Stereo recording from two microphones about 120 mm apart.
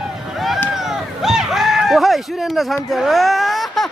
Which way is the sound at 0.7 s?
5° right (ahead or behind).